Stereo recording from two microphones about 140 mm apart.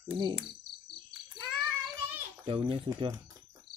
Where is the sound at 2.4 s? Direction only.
40° right (ahead or behind).